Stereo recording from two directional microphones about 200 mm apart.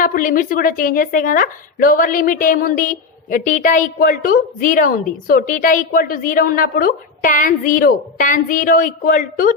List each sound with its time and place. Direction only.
0.0 s a woman's voice: 45° left (ahead or behind)